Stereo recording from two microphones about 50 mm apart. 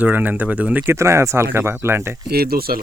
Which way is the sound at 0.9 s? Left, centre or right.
Right.